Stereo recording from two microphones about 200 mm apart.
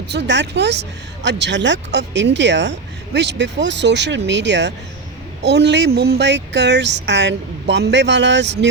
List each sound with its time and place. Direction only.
0.1 s speech: 60° right (ahead or behind)